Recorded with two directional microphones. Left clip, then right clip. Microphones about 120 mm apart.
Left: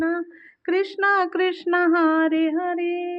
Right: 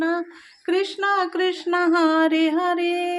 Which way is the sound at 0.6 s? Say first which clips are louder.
Left 1 dB; 10° left (ahead or behind).